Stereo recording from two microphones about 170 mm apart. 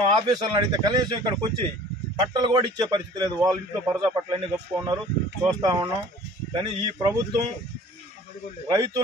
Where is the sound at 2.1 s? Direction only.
25° right (ahead or behind).